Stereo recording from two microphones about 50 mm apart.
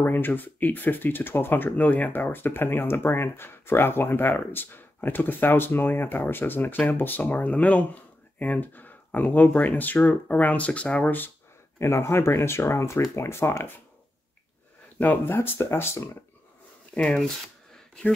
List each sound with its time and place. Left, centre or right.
0.0 s speech: left
11.8 s speech: left
15.2 s speech: left
16.9 s speech: centre